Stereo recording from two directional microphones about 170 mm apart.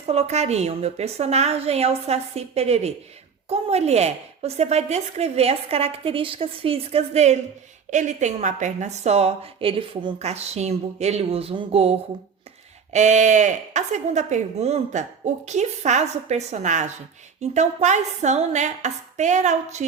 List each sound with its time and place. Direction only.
0.0 s a woman's voice: 40° right (ahead or behind)